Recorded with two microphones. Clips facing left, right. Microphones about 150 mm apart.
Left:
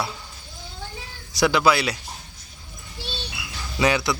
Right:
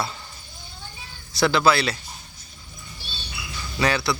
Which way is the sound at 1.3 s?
10° left (ahead or behind).